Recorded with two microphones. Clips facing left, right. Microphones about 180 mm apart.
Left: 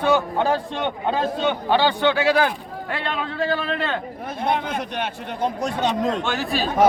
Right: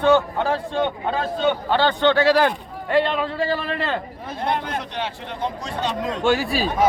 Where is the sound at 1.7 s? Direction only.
10° left (ahead or behind).